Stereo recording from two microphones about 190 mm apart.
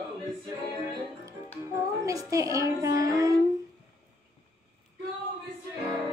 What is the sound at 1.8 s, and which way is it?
Child singing, 15° right (ahead or behind).